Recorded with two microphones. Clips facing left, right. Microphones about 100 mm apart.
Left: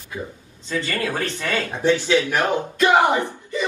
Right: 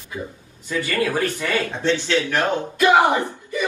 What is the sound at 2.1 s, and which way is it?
Speech, 15° left (ahead or behind).